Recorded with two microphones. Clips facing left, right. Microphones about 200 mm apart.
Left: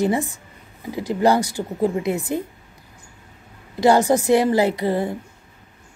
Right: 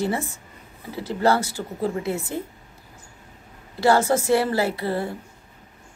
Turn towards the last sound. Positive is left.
turn(degrees=15)  # may be behind; listen again after turning